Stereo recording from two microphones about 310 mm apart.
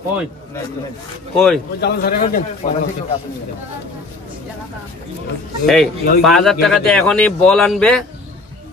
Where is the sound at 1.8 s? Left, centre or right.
Left.